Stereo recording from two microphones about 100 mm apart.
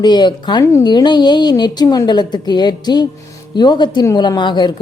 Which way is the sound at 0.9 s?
45° left (ahead or behind).